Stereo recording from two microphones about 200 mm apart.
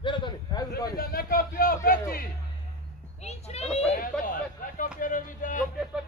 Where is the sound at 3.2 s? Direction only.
30° left (ahead or behind).